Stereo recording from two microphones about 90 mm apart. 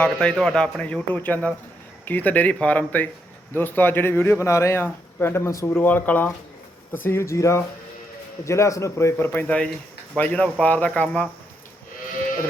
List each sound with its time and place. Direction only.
0.0 s a man's voice: 10° left (ahead or behind)